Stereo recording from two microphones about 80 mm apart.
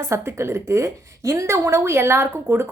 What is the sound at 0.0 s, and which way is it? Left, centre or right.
A woman's voice, right.